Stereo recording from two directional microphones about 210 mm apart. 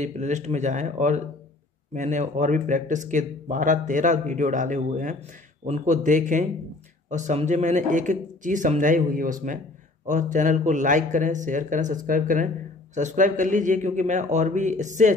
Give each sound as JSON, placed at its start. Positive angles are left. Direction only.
{"t": 0.0, "sound": "speech", "side_deg": -35}